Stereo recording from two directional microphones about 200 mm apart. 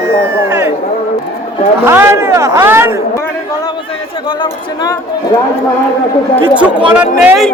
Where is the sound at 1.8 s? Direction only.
10° right (ahead or behind).